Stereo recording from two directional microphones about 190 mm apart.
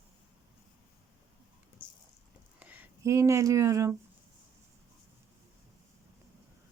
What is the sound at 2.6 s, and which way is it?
Speech, 10° right (ahead or behind).